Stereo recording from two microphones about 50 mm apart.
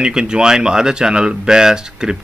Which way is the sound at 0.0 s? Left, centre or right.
Centre.